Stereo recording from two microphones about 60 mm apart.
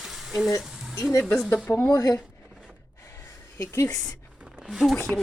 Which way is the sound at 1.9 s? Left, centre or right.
Left.